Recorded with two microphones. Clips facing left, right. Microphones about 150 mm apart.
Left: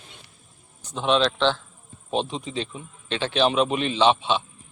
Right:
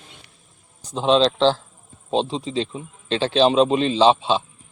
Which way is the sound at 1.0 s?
30° right (ahead or behind).